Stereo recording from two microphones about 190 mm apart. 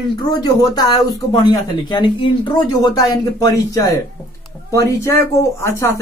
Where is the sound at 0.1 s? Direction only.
20° left (ahead or behind).